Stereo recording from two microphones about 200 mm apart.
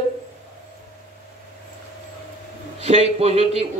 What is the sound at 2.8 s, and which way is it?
Speech, 30° right (ahead or behind).